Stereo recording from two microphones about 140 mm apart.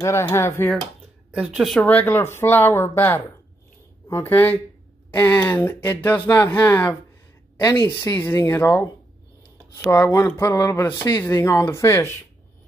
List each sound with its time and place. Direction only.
0.0 s speech: 20° left (ahead or behind)
1.3 s speech: 10° right (ahead or behind)
1.9 s speech: 10° left (ahead or behind)